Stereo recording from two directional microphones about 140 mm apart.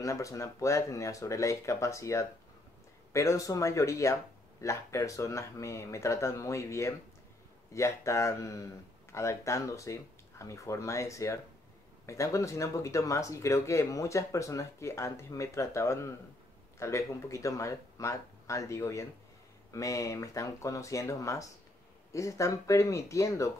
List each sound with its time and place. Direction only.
0.0 s speech: 20° left (ahead or behind)